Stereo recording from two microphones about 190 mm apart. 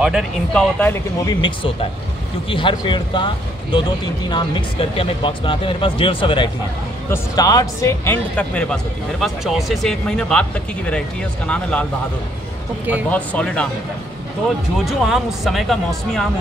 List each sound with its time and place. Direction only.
0.0 s speech: centre (ahead or behind)
0.7 s speech: 10° left (ahead or behind)
1.4 s speech: 25° left (ahead or behind); by 11.8 s 5° left (ahead or behind)
13.1 s speech: 5° left (ahead or behind)
14.9 s speech: centre (ahead or behind)